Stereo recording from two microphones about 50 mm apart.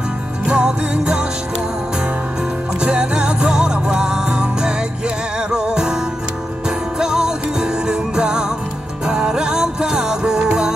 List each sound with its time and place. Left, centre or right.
0.5 s music: centre
2.8 s music: centre
7.0 s music: centre